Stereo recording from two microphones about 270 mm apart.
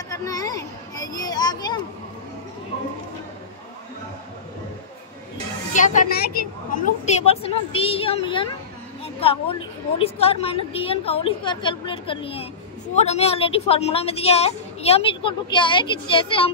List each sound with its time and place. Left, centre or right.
0.1 s children playing: centre
5.8 s a woman's voice: left